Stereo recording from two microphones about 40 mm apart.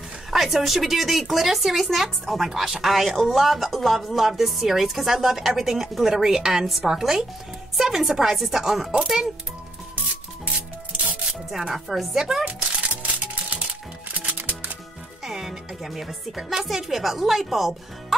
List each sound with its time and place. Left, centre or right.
0.3 s a woman's voice: centre
11.5 s a woman's voice: centre
12.4 s music: right
15.2 s speech: centre